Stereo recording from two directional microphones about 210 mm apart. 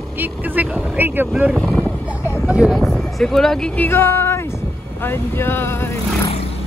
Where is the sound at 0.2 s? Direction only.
10° right (ahead or behind); by 6.3 s 10° left (ahead or behind).